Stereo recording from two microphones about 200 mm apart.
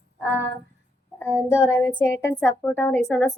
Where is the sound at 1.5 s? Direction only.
10° left (ahead or behind).